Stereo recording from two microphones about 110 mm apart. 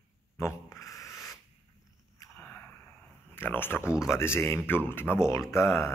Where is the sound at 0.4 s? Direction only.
25° left (ahead or behind).